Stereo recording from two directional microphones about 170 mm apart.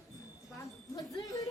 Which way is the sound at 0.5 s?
20° left (ahead or behind).